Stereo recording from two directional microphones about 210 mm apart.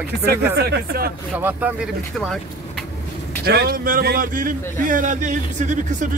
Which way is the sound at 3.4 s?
45° right (ahead or behind).